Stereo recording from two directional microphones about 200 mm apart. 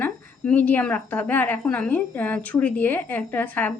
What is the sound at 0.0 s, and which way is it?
A woman's voice, 10° left (ahead or behind).